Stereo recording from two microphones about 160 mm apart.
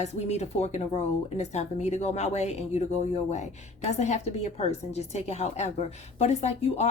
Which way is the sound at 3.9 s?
45° left (ahead or behind).